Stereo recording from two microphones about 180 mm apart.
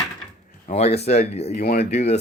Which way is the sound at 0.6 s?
35° left (ahead or behind).